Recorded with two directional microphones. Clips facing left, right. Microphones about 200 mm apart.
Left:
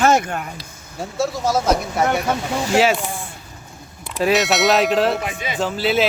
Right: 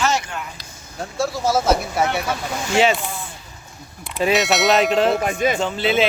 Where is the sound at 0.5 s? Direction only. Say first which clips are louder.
Left 1 dB; centre (ahead or behind).